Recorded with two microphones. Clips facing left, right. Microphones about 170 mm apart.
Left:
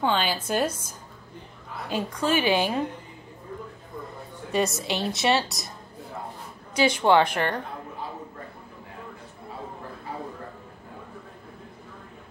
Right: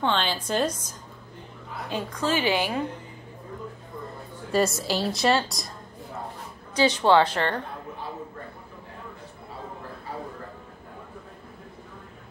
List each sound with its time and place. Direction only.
0.0 s a woman's voice: 5° left (ahead or behind)
2.1 s a woman's voice: 10° left (ahead or behind)
4.5 s speech: centre (ahead or behind)
6.7 s a woman's voice: 15° left (ahead or behind)